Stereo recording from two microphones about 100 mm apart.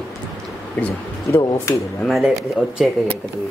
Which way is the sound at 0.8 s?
20° left (ahead or behind).